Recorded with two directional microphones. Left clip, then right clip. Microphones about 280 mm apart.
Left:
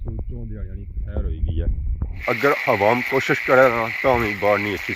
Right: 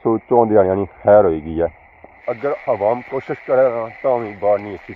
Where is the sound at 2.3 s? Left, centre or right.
Left.